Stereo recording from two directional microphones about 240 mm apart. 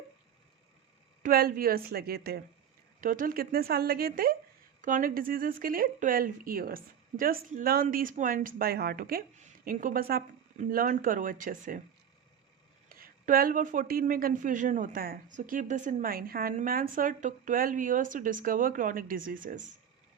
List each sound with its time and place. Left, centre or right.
1.2 s speech: right
12.9 s speech: right